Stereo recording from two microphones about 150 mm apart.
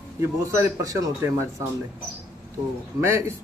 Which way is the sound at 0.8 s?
20° right (ahead or behind).